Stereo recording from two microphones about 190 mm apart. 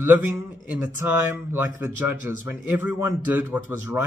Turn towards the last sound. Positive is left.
turn(degrees=-15)  # may be behind; listen again after turning